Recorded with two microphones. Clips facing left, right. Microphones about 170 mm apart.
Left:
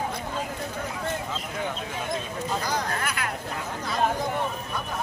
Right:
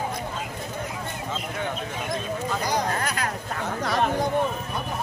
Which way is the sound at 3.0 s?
40° right (ahead or behind).